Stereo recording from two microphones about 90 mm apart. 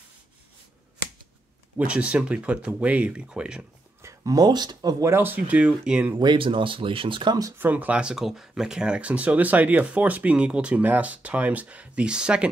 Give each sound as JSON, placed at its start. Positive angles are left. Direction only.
{"t": 1.8, "sound": "speech", "side_deg": -15}
{"t": 4.0, "sound": "speech", "side_deg": -35}
{"t": 5.0, "sound": "speech", "side_deg": -25}
{"t": 6.3, "sound": "speech", "side_deg": -75}
{"t": 7.5, "sound": "speech", "side_deg": -20}